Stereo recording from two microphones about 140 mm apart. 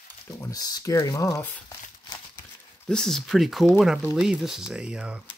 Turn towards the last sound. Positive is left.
turn(degrees=-5)  # may be behind; listen again after turning